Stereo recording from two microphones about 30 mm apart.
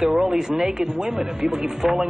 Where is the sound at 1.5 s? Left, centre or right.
Centre.